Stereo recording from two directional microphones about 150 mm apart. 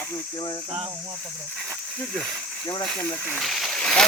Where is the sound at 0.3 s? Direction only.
30° left (ahead or behind).